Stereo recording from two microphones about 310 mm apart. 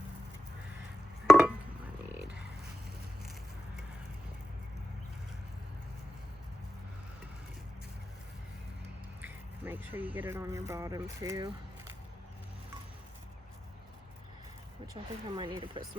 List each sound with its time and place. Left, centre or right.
1.3 s a sound: centre
9.2 s speech: centre
15.0 s speech: centre